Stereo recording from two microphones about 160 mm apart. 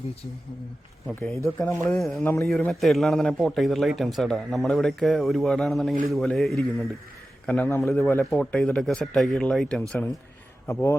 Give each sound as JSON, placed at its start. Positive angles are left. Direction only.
{"t": 1.0, "sound": "a man's voice", "side_deg": 0}
{"t": 1.6, "sound": "a man's voice", "side_deg": 15}